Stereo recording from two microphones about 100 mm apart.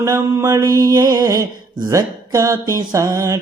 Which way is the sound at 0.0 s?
35° right (ahead or behind).